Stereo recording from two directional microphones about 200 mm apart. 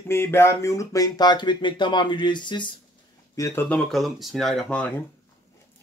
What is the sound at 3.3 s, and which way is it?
Speech, 15° left (ahead or behind).